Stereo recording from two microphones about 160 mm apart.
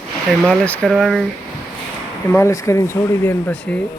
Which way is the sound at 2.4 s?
20° left (ahead or behind).